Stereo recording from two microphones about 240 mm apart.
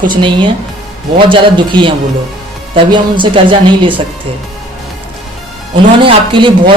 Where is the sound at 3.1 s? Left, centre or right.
Right.